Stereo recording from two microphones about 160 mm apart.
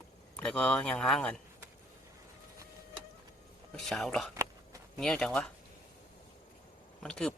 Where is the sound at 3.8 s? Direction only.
Centre (ahead or behind).